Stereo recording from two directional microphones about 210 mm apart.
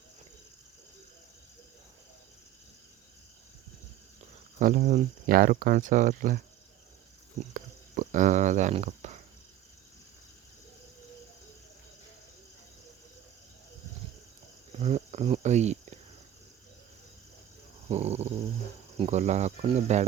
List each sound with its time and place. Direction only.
4.6 s speech: 40° right (ahead or behind)
7.5 s a sound: 35° right (ahead or behind)
14.8 s speech: 30° right (ahead or behind)
17.8 s speech: 30° right (ahead or behind)